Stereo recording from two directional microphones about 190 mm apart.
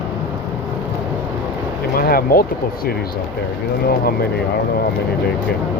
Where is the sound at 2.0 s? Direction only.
50° left (ahead or behind).